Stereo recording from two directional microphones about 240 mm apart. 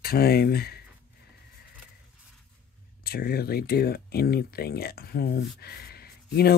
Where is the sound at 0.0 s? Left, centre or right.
Left.